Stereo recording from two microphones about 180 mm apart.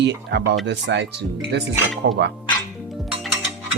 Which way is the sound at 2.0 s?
70° right (ahead or behind).